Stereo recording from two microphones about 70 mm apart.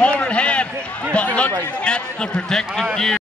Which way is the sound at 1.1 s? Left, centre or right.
Centre.